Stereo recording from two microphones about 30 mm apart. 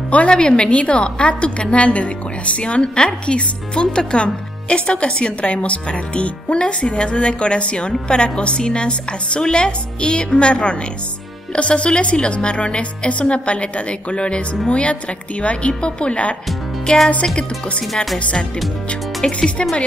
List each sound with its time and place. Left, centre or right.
0.3 s a woman's voice: left
0.7 s a woman's voice: left
16.9 s a woman's voice: left
19.2 s a woman's voice: left